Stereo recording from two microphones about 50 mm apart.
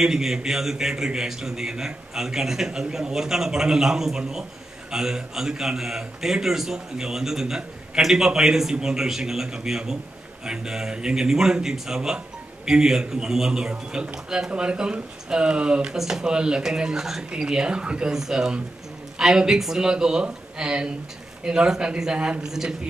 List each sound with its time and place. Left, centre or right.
0.0 s a man's voice: centre